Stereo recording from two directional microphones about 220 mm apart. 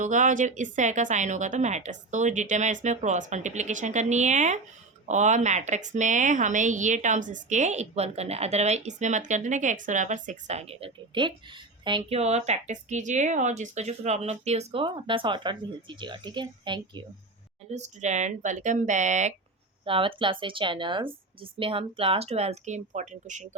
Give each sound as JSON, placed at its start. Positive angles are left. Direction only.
{"t": 0.0, "sound": "a woman's voice", "side_deg": -35}
{"t": 17.7, "sound": "a woman's voice", "side_deg": -30}